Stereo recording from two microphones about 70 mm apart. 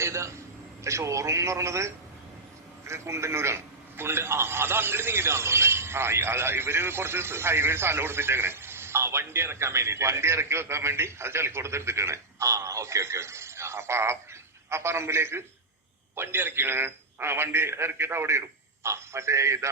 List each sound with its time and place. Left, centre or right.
0.0 s a man's voice: right